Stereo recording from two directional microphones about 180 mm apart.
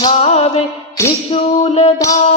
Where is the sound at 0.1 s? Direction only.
35° left (ahead or behind).